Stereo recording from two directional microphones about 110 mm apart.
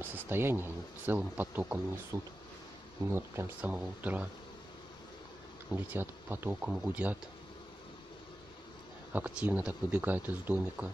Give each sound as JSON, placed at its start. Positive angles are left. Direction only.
{"t": 0.0, "sound": "speech", "side_deg": -20}
{"t": 2.1, "sound": "speech", "side_deg": -30}
{"t": 5.7, "sound": "speech", "side_deg": -20}
{"t": 9.1, "sound": "speech", "side_deg": -15}